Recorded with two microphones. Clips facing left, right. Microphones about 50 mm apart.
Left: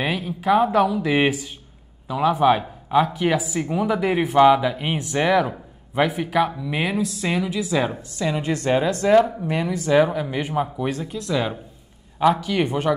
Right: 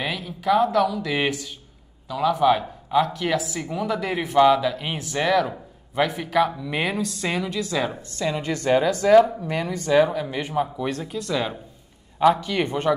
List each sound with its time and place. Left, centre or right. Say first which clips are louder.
0.0 s a man's voice: left 3 dB; centre
10.2 s speech: left 2 dB; centre
10.5 s speech: right 1 dB; left
10.9 s a woman's voice: left 1 dB; centre